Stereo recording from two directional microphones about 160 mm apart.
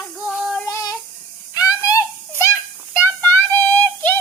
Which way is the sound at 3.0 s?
10° left (ahead or behind).